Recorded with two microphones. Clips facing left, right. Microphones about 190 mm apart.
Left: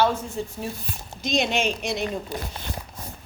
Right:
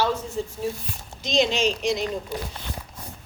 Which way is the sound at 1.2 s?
55° left (ahead or behind).